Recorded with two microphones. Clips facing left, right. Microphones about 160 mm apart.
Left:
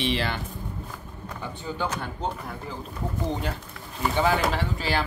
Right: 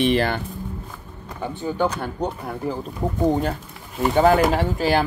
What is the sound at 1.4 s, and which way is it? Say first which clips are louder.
Speech: right 8 dB; 45° right (ahead or behind).